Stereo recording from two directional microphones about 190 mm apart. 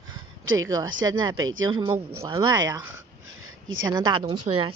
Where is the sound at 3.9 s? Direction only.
25° right (ahead or behind).